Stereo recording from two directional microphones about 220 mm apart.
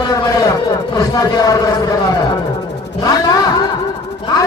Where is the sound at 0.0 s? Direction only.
15° left (ahead or behind).